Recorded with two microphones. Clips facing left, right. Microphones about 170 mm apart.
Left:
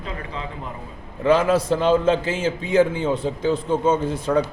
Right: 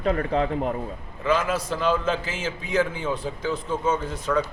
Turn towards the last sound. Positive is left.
turn(degrees=30)  # may be behind; listen again after turning